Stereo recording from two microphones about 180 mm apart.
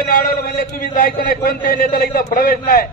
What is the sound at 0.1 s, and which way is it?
A man's voice, 55° left (ahead or behind).